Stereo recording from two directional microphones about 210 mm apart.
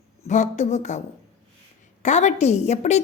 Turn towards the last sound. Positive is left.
turn(degrees=30)  # may be behind; listen again after turning